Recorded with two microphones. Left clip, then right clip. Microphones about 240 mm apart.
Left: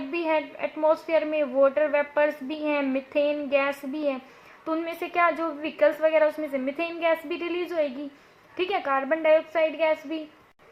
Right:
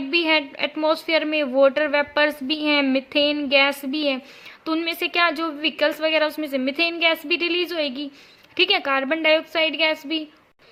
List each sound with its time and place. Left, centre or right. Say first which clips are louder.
0.1 s a woman's voice: right 6 dB; right